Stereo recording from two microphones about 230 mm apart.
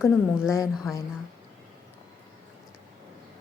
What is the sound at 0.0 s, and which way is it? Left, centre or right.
Speech, centre.